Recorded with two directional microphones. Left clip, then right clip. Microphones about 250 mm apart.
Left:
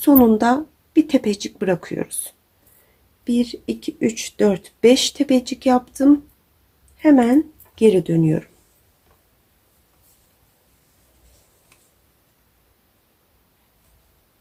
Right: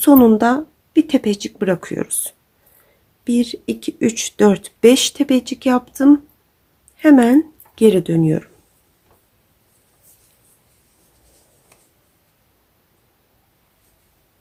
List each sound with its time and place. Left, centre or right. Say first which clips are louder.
0.0 s speech: right 3 dB; centre
3.2 s speech: right 2 dB; centre